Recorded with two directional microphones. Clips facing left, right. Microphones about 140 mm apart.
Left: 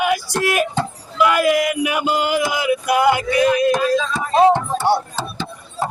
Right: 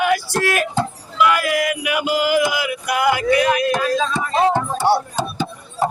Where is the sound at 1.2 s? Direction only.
25° left (ahead or behind).